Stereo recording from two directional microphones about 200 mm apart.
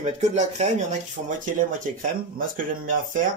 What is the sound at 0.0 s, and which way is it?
Speech, 35° right (ahead or behind).